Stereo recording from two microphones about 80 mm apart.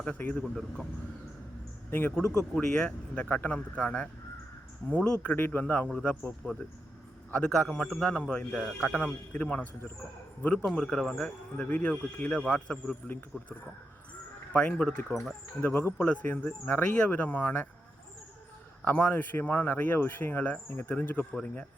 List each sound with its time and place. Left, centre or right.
0.0 s speech: centre
0.4 s a man's voice: centre
1.9 s speech: left
2.1 s a man's voice: centre
7.5 s a man's voice: centre
8.0 s speech: centre
14.5 s speech: centre
15.1 s a man's voice: centre
16.0 s speech: centre
18.9 s speech: left